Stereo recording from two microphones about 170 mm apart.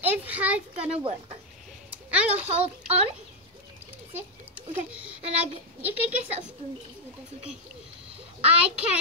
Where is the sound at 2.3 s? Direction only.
40° right (ahead or behind).